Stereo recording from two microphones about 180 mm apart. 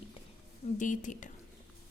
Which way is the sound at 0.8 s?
45° left (ahead or behind).